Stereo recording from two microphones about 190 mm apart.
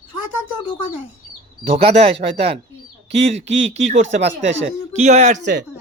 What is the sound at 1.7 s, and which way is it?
Speech, 30° right (ahead or behind).